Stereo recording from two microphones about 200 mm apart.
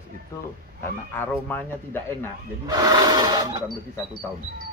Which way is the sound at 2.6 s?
20° right (ahead or behind).